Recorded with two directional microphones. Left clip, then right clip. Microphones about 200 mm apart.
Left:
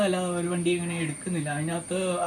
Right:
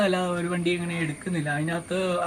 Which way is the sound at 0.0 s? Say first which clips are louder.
Right 2 dB; 5° right (ahead or behind).